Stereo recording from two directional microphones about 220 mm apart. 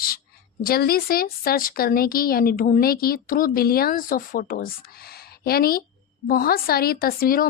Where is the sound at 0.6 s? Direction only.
45° left (ahead or behind).